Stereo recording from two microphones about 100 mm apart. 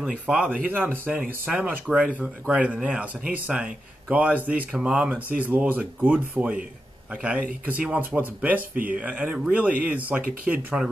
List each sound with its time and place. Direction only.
0.0 s speech: 5° right (ahead or behind)
0.5 s speech: 20° right (ahead or behind)
1.9 s speech: centre (ahead or behind)
2.2 s speech: 10° right (ahead or behind)